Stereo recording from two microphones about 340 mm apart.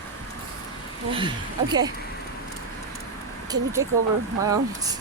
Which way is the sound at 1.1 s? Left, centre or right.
Centre.